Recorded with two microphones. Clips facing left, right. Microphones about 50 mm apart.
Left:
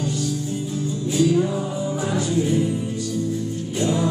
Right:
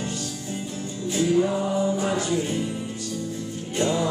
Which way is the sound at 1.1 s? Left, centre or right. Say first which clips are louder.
Left 3 dB; right.